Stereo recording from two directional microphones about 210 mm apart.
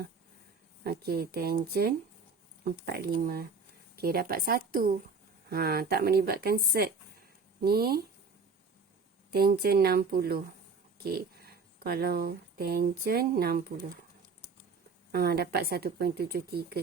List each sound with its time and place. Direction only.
0.9 s speech: 50° right (ahead or behind)
9.3 s speech: 45° right (ahead or behind)
15.1 s speech: 45° right (ahead or behind)